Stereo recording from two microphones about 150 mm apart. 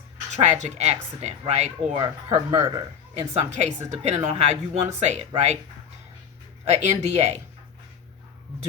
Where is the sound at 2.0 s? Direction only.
35° right (ahead or behind).